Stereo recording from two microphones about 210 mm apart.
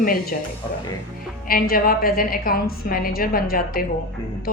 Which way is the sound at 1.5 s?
45° left (ahead or behind).